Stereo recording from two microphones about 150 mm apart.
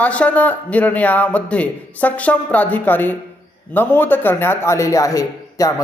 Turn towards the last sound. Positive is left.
turn(degrees=20)  # may be behind; listen again after turning